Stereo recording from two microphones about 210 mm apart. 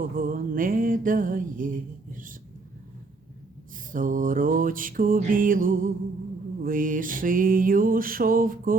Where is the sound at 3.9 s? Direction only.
40° right (ahead or behind).